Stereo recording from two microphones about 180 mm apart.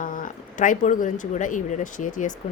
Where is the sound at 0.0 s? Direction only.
45° left (ahead or behind).